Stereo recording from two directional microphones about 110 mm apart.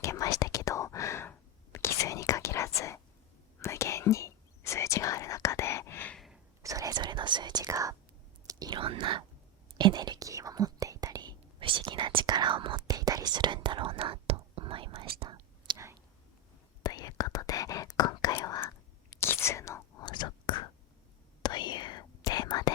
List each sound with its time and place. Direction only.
0.0 s whispering: 30° left (ahead or behind)
6.1 s sneeze: centre (ahead or behind)
6.6 s whispering: 30° right (ahead or behind)
8.7 s whispering: 50° right (ahead or behind)
12.9 s whispering: 35° right (ahead or behind)
16.8 s whispering: 35° left (ahead or behind)
19.2 s whispering: 25° left (ahead or behind)
20.1 s whispering: 45° left (ahead or behind)